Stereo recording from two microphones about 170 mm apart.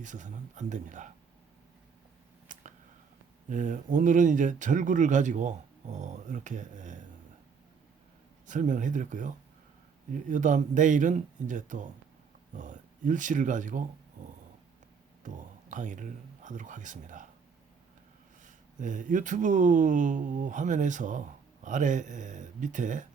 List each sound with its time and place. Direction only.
0.0 s speech: 45° right (ahead or behind)
2.5 s a sound: 50° right (ahead or behind)
3.5 s speech: 45° right (ahead or behind)
8.4 s speech: 50° right (ahead or behind)
14.2 s dog: 45° right (ahead or behind)
15.2 s speech: 50° right (ahead or behind)
18.4 s speech: 50° right (ahead or behind)